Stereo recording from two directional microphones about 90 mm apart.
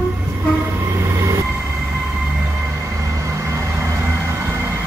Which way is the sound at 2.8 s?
35° right (ahead or behind).